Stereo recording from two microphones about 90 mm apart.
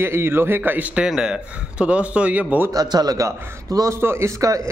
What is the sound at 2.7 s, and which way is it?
Speech, 45° right (ahead or behind).